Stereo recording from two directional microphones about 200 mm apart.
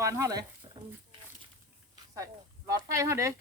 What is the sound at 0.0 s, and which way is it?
Speech, 15° right (ahead or behind).